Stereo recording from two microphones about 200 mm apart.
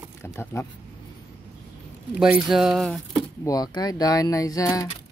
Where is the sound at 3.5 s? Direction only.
20° left (ahead or behind).